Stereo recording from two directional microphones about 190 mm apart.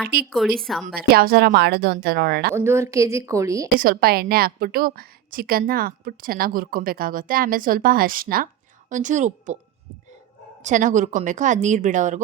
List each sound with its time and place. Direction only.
0.3 s a woman's voice: centre (ahead or behind)
0.9 s a woman's voice: 55° right (ahead or behind)
2.6 s a woman's voice: 15° right (ahead or behind)
3.8 s a woman's voice: 50° right (ahead or behind)
10.6 s a woman's voice: 40° right (ahead or behind)